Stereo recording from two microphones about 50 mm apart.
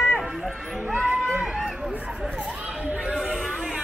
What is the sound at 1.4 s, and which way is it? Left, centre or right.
Run, centre.